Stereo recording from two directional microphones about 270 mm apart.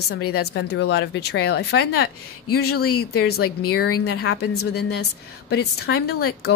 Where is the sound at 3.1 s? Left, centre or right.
Left.